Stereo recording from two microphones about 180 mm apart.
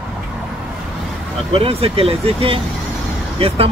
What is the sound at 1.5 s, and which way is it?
Speech, 30° right (ahead or behind).